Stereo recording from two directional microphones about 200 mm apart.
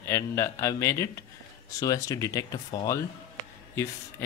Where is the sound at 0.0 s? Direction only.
15° left (ahead or behind).